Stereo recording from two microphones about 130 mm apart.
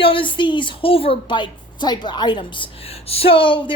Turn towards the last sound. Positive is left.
turn(degrees=40)  # may be behind; listen again after turning